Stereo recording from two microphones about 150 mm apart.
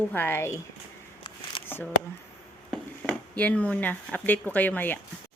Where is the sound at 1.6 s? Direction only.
40° left (ahead or behind).